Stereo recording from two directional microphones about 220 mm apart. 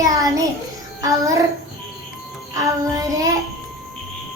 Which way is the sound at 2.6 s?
15° right (ahead or behind).